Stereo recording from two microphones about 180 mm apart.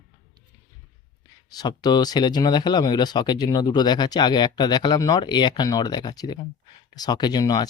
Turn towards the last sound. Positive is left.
turn(degrees=20)  # may be behind; listen again after turning